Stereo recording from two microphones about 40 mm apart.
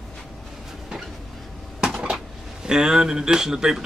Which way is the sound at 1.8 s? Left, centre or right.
Centre.